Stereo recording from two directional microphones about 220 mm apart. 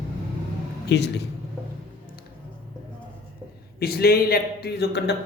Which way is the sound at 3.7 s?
45° left (ahead or behind).